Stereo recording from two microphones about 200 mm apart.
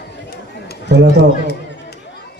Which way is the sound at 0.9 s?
60° right (ahead or behind).